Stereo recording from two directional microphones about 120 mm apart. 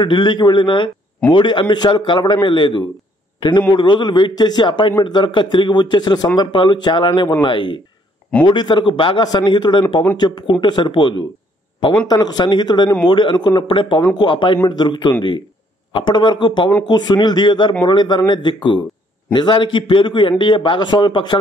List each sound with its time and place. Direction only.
0.0 s a man's voice: 40° left (ahead or behind)